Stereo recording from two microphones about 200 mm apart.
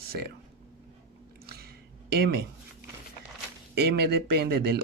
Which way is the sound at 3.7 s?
55° right (ahead or behind).